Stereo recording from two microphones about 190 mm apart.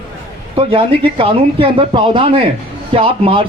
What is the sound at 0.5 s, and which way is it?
Speech, 30° right (ahead or behind).